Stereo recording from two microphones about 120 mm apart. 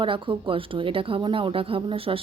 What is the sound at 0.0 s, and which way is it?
Speech, 45° right (ahead or behind).